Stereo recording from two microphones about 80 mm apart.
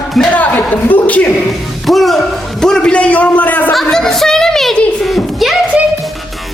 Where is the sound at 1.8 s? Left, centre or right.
Centre; by 3.7 s left.